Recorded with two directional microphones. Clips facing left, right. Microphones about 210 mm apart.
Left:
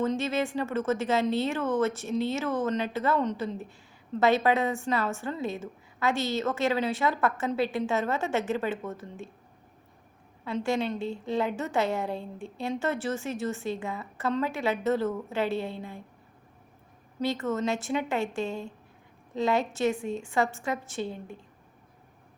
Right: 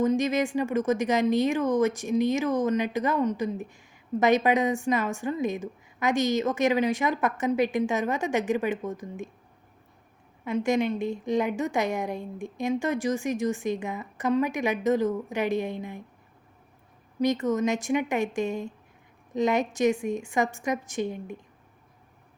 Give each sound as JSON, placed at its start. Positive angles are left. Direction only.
{"t": 0.0, "sound": "speech", "side_deg": -15}
{"t": 10.4, "sound": "speech", "side_deg": -15}
{"t": 17.2, "sound": "speech", "side_deg": -15}